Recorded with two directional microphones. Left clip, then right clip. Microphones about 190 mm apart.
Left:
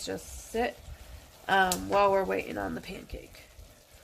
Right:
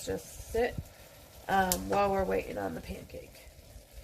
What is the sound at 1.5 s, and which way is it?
Speech, 35° left (ahead or behind).